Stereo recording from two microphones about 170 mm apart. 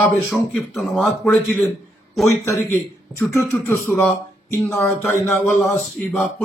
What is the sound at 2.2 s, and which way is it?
A man's voice, 15° left (ahead or behind).